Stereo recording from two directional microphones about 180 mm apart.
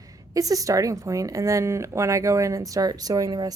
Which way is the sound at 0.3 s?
20° right (ahead or behind).